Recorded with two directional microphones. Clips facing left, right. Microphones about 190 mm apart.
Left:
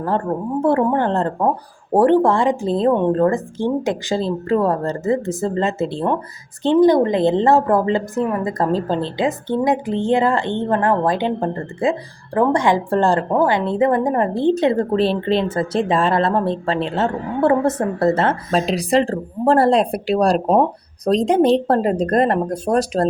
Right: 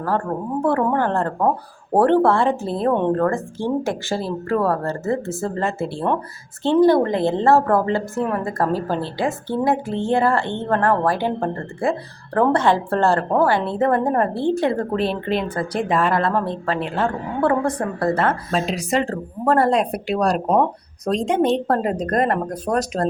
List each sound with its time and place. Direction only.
0.0 s a woman's voice: 20° left (ahead or behind)